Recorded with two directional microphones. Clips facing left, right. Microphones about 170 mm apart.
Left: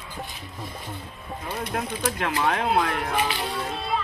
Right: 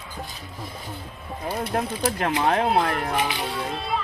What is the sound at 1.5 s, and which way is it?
Speech, 35° right (ahead or behind).